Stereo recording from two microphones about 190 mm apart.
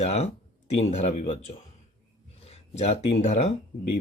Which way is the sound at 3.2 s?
35° left (ahead or behind).